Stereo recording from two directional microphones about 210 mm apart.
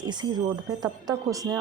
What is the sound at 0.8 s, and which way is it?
Speech, 20° right (ahead or behind).